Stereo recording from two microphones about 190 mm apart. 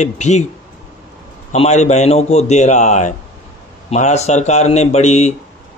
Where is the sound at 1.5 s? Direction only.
35° left (ahead or behind).